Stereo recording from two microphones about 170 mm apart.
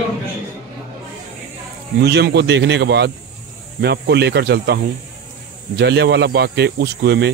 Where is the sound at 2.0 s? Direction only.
80° right.